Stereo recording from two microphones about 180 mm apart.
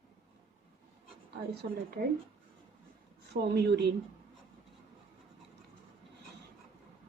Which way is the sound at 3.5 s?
65° right (ahead or behind).